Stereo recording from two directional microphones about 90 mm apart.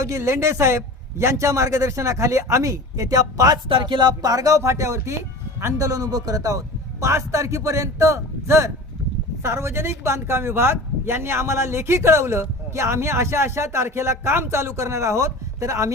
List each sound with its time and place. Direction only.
0.0 s speech: 30° right (ahead or behind)
3.7 s speech: 60° right (ahead or behind); by 15.9 s 35° right (ahead or behind)